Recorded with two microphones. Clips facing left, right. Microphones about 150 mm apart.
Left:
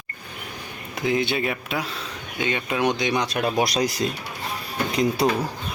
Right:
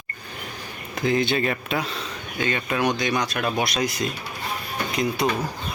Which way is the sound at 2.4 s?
15° left (ahead or behind).